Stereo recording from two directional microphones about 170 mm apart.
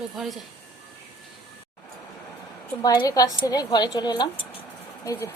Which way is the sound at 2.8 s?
20° left (ahead or behind).